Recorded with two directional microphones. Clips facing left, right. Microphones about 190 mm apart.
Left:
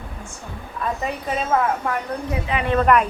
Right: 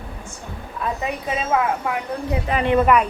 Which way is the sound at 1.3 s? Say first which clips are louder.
Even; 5° right (ahead or behind).